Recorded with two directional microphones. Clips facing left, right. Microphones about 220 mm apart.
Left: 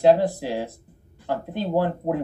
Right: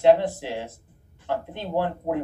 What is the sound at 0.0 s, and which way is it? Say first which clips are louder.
Speech: left 1 dB; 35° left (ahead or behind).